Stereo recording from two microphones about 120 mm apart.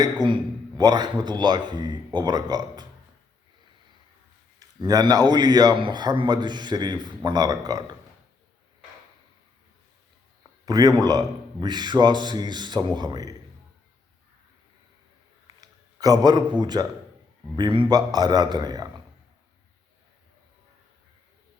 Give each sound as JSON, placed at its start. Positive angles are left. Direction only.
{"t": 0.0, "sound": "a man's voice", "side_deg": -35}
{"t": 4.6, "sound": "a man's voice", "side_deg": -30}
{"t": 10.7, "sound": "a man's voice", "side_deg": -35}
{"t": 15.6, "sound": "a man's voice", "side_deg": -30}